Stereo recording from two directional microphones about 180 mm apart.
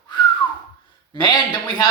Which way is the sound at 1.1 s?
25° left (ahead or behind).